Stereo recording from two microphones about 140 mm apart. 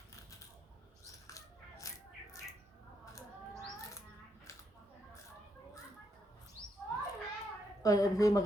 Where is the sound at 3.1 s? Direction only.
25° left (ahead or behind).